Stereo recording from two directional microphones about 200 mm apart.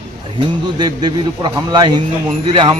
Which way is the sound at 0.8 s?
20° right (ahead or behind).